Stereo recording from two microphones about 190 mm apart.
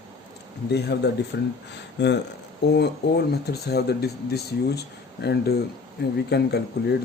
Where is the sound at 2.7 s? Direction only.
60° left (ahead or behind).